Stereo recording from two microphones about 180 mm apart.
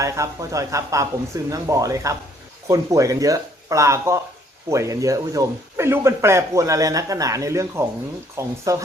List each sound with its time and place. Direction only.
0.0 s speech: 15° right (ahead or behind)